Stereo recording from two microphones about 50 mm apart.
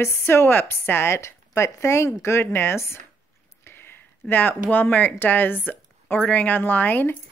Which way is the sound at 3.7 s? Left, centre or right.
Left.